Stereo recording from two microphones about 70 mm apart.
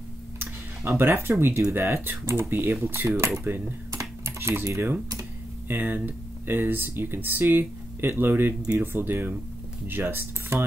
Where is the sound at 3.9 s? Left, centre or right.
Right.